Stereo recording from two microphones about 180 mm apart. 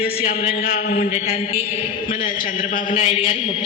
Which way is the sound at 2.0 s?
50° left (ahead or behind).